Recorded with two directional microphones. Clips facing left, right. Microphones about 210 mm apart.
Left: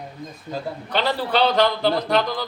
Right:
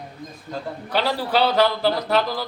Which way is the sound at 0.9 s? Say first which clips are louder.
Even; 10° right (ahead or behind).